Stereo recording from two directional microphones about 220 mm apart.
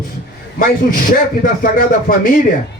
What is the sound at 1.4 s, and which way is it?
Speech, 40° left (ahead or behind).